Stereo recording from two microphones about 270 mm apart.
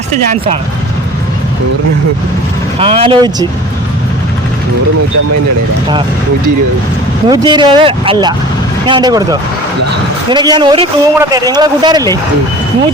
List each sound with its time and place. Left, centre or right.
0.1 s speech: right
2.7 s speech: right
7.3 s a man's voice: centre